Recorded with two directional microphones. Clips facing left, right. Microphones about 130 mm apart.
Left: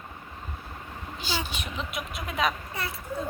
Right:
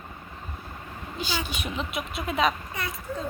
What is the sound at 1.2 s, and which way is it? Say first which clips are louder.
Speech: right 2 dB; 15° right (ahead or behind).